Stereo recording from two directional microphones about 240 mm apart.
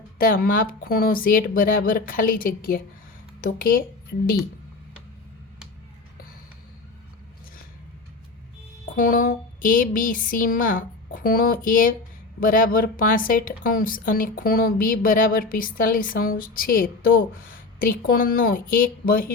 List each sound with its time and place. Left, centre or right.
0.2 s a woman's voice: left
9.0 s a woman's voice: left